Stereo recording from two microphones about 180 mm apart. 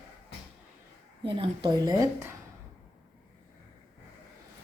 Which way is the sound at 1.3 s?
30° right (ahead or behind).